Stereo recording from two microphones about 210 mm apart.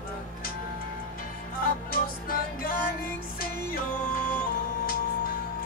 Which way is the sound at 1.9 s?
45° left (ahead or behind).